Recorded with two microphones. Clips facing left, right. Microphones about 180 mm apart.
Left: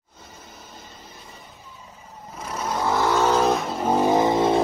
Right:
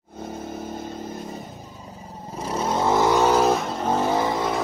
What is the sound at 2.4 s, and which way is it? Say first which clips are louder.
Vehicle: right 3 dB; 30° right (ahead or behind).